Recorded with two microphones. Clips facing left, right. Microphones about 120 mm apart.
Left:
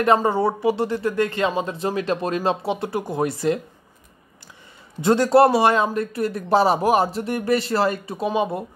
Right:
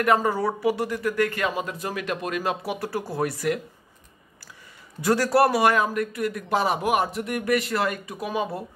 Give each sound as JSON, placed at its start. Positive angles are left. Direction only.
{"t": 0.0, "sound": "speech", "side_deg": 25}
{"t": 5.0, "sound": "speech", "side_deg": 25}